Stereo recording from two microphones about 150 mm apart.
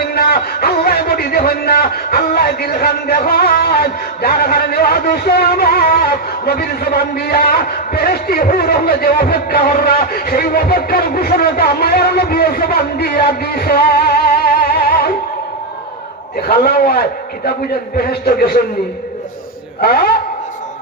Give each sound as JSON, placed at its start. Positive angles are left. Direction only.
{"t": 0.1, "sound": "a man's voice", "side_deg": 90}
{"t": 16.5, "sound": "a man's voice", "side_deg": 90}
{"t": 19.8, "sound": "a man's voice", "side_deg": 90}